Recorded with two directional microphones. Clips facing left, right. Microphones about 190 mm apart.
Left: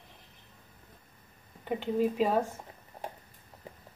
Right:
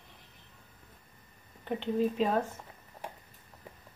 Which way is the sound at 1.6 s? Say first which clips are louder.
Left 1 dB; 10° left (ahead or behind).